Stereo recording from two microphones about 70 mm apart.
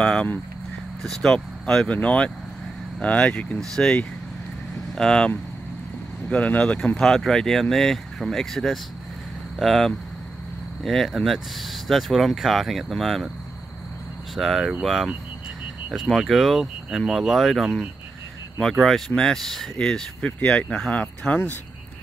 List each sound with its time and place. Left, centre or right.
0.0 s a sound: centre
1.0 s speech: centre
14.3 s speech: centre
20.6 s speech: centre
20.9 s speech: centre